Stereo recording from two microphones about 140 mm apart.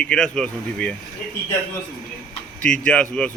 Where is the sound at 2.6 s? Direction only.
10° left (ahead or behind).